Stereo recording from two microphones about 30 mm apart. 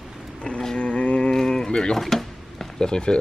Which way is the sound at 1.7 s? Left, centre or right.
Left.